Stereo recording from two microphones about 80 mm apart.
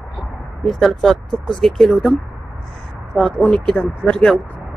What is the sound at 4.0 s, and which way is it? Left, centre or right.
Speech, centre.